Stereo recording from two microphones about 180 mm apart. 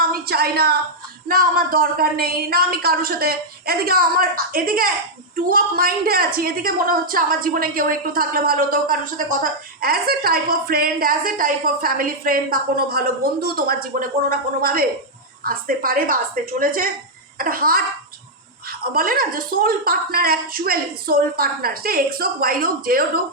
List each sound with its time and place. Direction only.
0.0 s a woman's voice: 55° right (ahead or behind)